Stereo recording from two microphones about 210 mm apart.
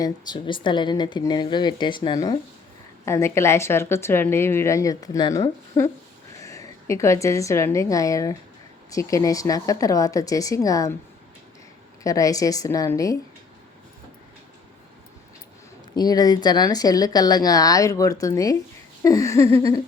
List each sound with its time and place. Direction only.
0.0 s a woman's voice: 20° left (ahead or behind)
12.0 s a woman's voice: 15° left (ahead or behind)
16.0 s a woman's voice: 20° left (ahead or behind)